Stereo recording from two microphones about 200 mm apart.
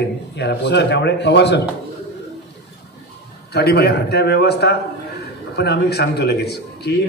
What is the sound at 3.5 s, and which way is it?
Speech, 55° left (ahead or behind).